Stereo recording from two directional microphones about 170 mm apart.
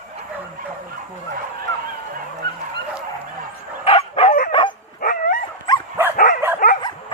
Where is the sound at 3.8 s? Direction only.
35° left (ahead or behind).